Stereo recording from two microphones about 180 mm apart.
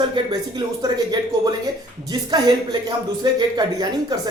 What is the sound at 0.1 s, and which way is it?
Speech, 20° right (ahead or behind).